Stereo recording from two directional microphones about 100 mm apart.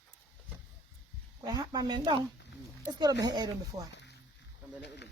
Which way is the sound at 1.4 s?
45° right (ahead or behind).